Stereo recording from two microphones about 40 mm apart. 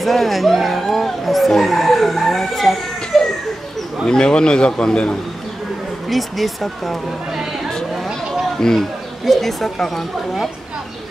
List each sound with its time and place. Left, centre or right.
0.0 s a sound: centre
4.0 s a man's voice: left
6.0 s speech: centre
8.5 s speech: centre
9.2 s speech: centre